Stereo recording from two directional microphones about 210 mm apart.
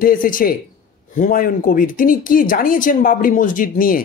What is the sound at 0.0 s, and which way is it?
Speech, 40° left (ahead or behind).